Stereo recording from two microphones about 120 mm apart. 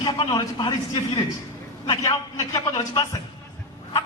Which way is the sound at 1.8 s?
30° left (ahead or behind).